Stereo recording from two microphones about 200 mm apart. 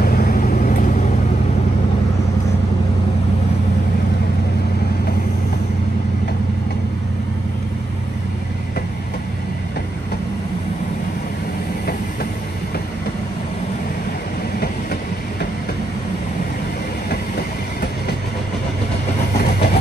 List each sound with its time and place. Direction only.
0.0 s vehicle: 50° left (ahead or behind)
19.3 s vehicle: 50° left (ahead or behind)